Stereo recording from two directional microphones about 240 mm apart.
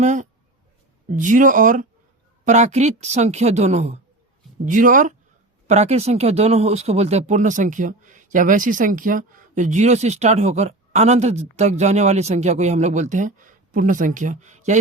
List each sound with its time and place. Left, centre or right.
0.0 s speech: right